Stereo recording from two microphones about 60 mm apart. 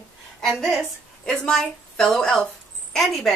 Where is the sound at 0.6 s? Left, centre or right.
Centre.